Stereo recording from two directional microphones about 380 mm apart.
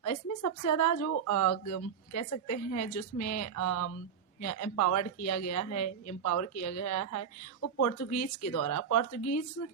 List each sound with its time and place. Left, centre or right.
0.0 s speech: left